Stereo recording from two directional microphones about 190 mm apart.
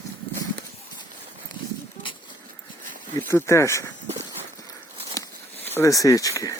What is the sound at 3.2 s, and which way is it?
Speech, 15° left (ahead or behind).